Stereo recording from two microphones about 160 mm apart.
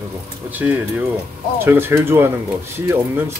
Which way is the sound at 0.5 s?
10° right (ahead or behind).